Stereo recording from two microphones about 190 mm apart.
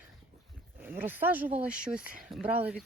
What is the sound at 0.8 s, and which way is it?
Speech, 10° right (ahead or behind).